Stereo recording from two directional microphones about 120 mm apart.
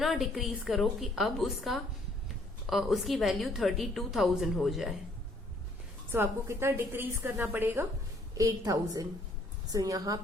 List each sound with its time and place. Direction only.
0.0 s a woman's voice: centre (ahead or behind)
6.1 s a woman's voice: 20° right (ahead or behind)
8.4 s a woman's voice: 25° right (ahead or behind)